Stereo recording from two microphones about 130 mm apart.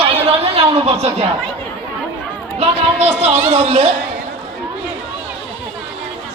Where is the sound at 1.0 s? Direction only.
50° right (ahead or behind).